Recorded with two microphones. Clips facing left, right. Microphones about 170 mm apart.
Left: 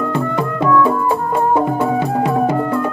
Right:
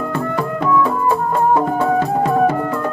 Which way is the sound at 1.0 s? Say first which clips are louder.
Even; 15° left (ahead or behind).